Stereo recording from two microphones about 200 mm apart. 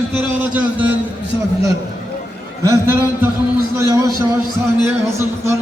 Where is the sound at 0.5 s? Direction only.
10° right (ahead or behind).